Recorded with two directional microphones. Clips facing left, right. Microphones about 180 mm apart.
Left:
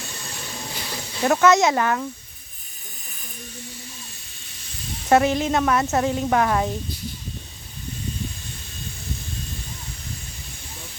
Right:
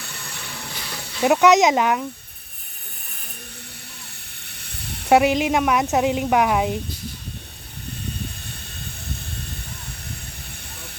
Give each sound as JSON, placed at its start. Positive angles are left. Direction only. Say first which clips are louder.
{"t": 0.0, "sound": "train", "louder": "left 2 dB", "side_deg": -60}
{"t": 1.2, "sound": "a woman's voice", "louder": "right 2 dB", "side_deg": -15}
{"t": 4.4, "sound": "snake", "louder": "left 1 dB", "side_deg": -65}
{"t": 5.0, "sound": "a woman's voice", "louder": "right 2 dB", "side_deg": -15}